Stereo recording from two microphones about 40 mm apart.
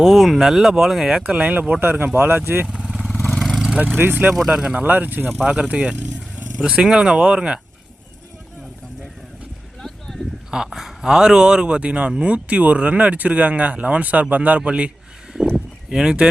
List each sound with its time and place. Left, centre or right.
0.0 s speech: centre
1.1 s speech: right
1.8 s speech: right
2.6 s vehicle: centre
3.3 s vehicle: centre
3.9 s speech: right
4.4 s speech: centre
4.9 s speech: right
5.5 s speech: right
6.1 s a sound: right
6.7 s speech: right
9.8 s a sound: centre
10.7 s speech: centre; by 14.8 s right
15.5 s a sound: centre